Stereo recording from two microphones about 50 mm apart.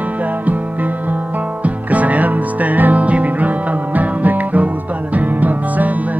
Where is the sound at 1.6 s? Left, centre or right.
Right.